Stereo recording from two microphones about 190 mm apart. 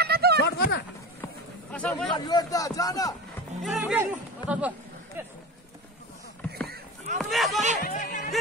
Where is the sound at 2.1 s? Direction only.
20° left (ahead or behind).